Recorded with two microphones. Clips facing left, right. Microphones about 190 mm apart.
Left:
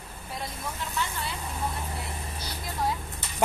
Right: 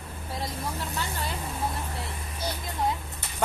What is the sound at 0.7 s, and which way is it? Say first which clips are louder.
Vehicle: even; 35° right (ahead or behind).